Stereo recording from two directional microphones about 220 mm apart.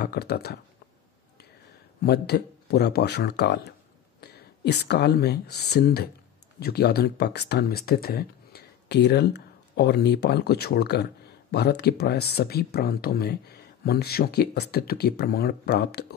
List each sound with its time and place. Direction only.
0.0 s speech: 45° left (ahead or behind)
2.0 s speech: 45° left (ahead or behind)